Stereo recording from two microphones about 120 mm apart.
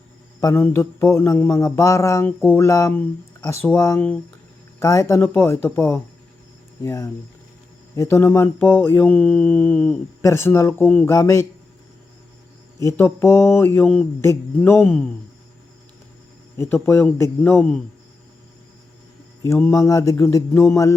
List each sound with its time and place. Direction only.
0.3 s mantra: 20° left (ahead or behind)
10.2 s mantra: 20° left (ahead or behind)
12.8 s mantra: 25° left (ahead or behind)
13.8 s speech: 5° left (ahead or behind)
14.2 s mantra: 20° left (ahead or behind)
14.8 s mantra: 5° left (ahead or behind)
16.6 s mantra: 20° left (ahead or behind)
19.4 s mantra: 20° left (ahead or behind)